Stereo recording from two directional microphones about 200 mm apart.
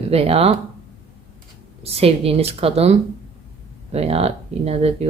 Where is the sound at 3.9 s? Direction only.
30° right (ahead or behind).